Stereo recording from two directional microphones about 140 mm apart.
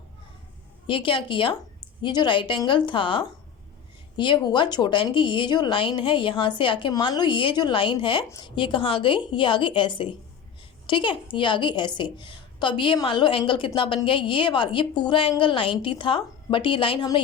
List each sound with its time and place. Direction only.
0.9 s speech: 40° left (ahead or behind)